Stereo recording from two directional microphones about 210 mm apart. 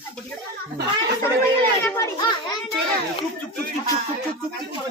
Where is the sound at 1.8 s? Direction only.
15° left (ahead or behind).